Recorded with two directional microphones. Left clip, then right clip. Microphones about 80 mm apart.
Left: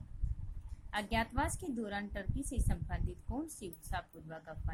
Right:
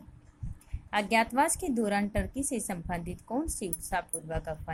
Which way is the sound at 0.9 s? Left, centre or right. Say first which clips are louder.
Right 10 dB; right.